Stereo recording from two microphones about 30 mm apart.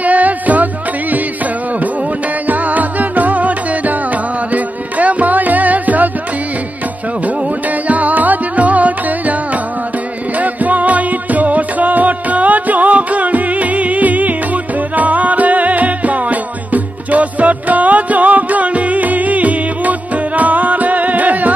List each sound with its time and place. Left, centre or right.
0.0 s music: right
2.4 s music: right
7.9 s music: right